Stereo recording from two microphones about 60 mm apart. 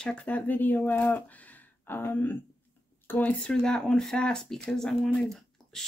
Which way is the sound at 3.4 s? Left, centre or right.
Centre.